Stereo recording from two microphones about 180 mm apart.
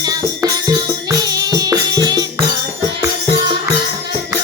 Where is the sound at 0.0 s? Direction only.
20° right (ahead or behind).